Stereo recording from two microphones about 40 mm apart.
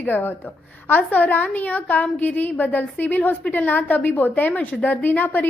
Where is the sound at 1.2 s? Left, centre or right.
Left.